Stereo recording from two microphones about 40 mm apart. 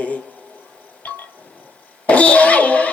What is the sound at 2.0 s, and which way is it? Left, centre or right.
Speech, left.